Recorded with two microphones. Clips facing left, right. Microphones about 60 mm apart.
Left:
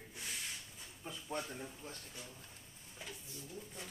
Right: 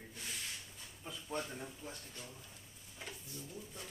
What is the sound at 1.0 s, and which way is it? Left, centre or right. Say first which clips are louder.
Speech: right 1 dB; centre.